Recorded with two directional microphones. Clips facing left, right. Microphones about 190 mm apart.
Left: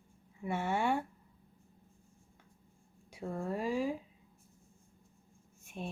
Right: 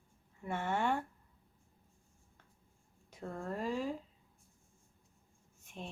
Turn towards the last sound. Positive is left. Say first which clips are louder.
# left 5 dB
turn(degrees=10)  # may be behind; listen again after turning